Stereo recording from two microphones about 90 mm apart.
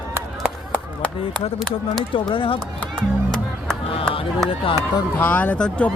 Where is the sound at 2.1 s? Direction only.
70° left (ahead or behind).